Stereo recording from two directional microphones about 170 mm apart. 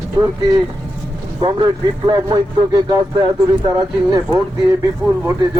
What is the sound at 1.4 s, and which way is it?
Speech, 30° right (ahead or behind).